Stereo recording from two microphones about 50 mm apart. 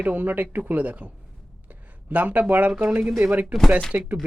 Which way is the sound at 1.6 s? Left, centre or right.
Right.